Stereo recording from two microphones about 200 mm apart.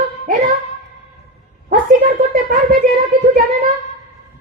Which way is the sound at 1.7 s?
40° right (ahead or behind).